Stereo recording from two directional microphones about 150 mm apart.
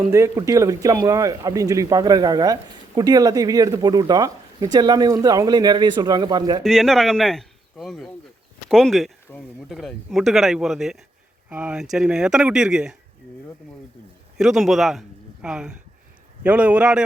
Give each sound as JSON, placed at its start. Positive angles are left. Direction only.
{"t": 0.1, "sound": "speech", "side_deg": -20}
{"t": 6.6, "sound": "speech", "side_deg": 0}
{"t": 14.3, "sound": "a man's voice", "side_deg": -5}